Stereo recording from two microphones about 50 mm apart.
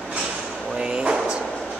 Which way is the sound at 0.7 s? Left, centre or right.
Centre.